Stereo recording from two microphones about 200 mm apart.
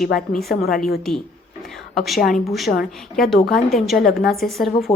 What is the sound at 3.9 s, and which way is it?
Speech, 50° left (ahead or behind).